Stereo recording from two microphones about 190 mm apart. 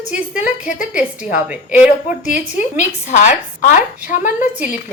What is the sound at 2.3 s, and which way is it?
A woman's voice, 40° left (ahead or behind).